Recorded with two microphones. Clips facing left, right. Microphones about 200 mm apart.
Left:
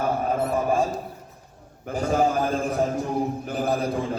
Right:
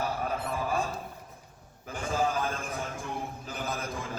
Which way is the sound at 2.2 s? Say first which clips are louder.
Left 8 dB; 40° left (ahead or behind).